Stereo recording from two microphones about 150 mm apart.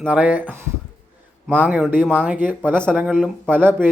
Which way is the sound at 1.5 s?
10° right (ahead or behind).